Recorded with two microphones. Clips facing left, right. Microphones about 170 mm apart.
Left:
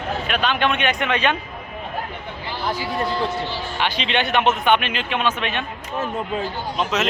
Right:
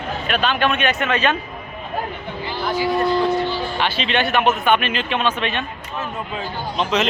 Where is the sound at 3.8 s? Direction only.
15° left (ahead or behind).